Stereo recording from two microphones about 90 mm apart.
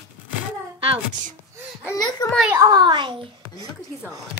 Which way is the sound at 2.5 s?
45° right (ahead or behind).